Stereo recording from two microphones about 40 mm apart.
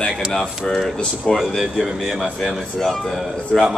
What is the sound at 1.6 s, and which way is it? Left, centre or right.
Speech, centre.